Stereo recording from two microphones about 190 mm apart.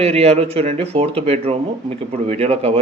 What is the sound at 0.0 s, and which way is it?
A man's voice, 35° right (ahead or behind).